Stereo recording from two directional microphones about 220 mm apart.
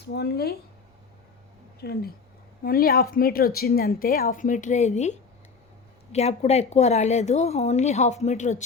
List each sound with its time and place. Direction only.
0.0 s speech: 50° left (ahead or behind)
1.8 s speech: 45° left (ahead or behind)